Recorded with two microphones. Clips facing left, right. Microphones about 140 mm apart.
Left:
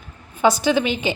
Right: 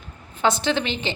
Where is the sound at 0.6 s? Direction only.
10° left (ahead or behind).